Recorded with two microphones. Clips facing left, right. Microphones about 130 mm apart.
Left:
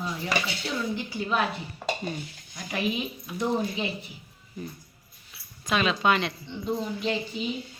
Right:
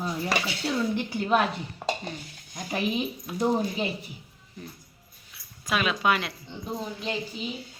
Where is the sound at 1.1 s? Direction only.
55° right (ahead or behind).